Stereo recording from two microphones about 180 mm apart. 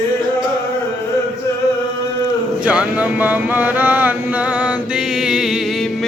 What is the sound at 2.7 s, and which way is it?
Chant, 10° right (ahead or behind).